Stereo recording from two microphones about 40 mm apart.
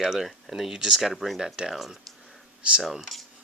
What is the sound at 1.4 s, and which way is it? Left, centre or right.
Speech, centre.